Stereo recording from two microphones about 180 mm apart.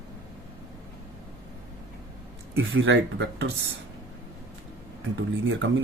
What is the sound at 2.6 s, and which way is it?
Speech, 90° right.